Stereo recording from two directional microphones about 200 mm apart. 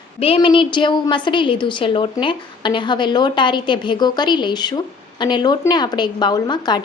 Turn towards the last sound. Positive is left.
turn(degrees=20)  # may be behind; listen again after turning